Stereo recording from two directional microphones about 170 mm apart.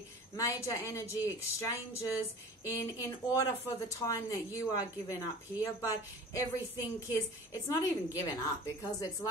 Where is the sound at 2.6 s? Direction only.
20° left (ahead or behind).